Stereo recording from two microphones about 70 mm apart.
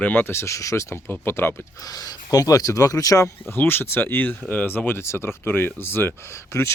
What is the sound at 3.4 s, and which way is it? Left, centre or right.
Speech, left.